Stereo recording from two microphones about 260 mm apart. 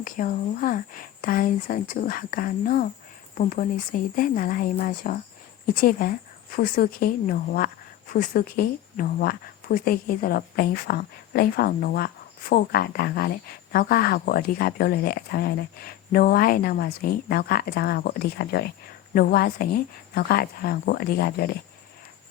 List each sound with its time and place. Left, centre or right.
0.0 s speech: left